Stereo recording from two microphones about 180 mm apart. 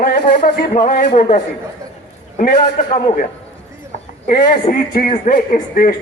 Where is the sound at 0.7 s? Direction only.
50° left (ahead or behind).